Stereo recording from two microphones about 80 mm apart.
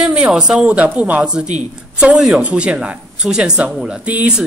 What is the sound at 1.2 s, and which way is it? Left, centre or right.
Speech, centre.